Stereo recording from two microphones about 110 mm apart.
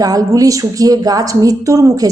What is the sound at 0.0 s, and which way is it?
Speech, 35° right (ahead or behind).